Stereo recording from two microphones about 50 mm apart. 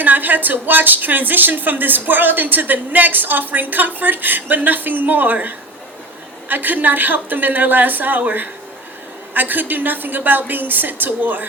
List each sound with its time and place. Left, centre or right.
0.0 s a woman's voice: right